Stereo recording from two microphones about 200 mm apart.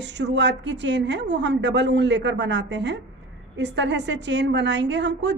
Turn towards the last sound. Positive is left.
turn(degrees=-60)  # may be behind; listen again after turning